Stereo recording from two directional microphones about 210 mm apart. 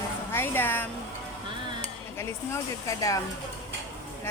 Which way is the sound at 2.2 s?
15° left (ahead or behind).